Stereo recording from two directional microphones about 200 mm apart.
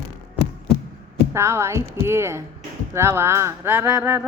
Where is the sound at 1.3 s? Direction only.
15° right (ahead or behind).